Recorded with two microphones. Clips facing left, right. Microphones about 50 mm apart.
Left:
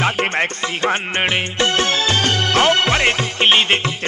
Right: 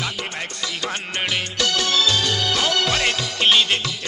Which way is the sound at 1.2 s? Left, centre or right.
Left.